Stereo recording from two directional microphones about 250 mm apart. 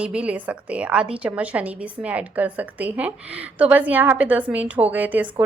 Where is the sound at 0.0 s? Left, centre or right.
Centre.